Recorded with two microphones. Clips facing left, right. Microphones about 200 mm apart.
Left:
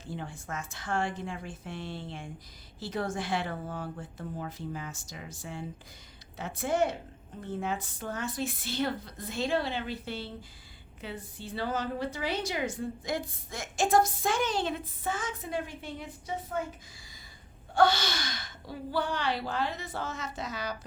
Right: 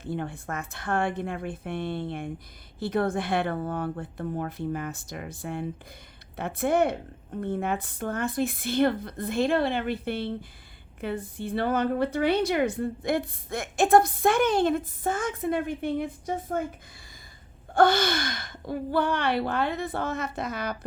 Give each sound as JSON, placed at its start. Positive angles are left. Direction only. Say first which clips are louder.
{"t": 0.0, "sound": "a woman's voice", "louder": "right 7 dB", "side_deg": -60}
{"t": 17.7, "sound": "a woman's voice", "louder": "right 4 dB", "side_deg": -55}